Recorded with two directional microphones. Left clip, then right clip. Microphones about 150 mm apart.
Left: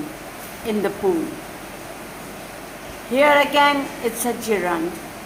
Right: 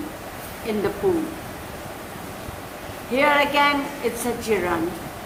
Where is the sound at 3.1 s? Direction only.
55° left (ahead or behind).